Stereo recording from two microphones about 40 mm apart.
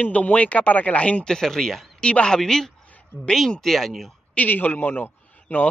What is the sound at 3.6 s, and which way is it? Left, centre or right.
Speech, centre.